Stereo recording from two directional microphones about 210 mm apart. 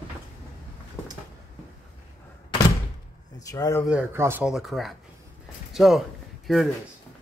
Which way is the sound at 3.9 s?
10° right (ahead or behind).